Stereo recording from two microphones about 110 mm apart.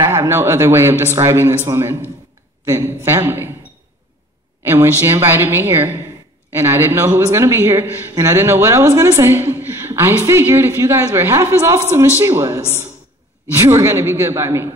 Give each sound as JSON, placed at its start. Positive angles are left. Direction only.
{"t": 0.0, "sound": "a woman's voice", "side_deg": -25}
{"t": 4.6, "sound": "a woman's voice", "side_deg": -20}